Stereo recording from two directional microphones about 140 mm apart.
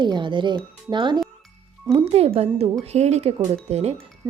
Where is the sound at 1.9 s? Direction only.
45° right (ahead or behind).